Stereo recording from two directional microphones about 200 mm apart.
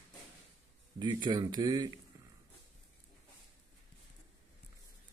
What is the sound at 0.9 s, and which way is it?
Speech, 20° right (ahead or behind).